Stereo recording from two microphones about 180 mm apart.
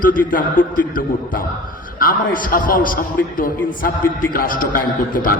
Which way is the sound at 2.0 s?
50° left (ahead or behind).